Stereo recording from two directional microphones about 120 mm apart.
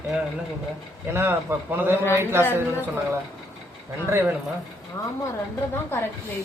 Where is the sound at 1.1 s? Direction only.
20° right (ahead or behind).